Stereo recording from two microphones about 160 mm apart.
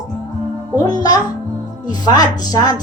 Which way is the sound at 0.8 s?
25° left (ahead or behind).